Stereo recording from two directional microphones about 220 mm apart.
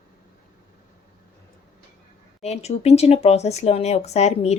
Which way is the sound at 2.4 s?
30° left (ahead or behind).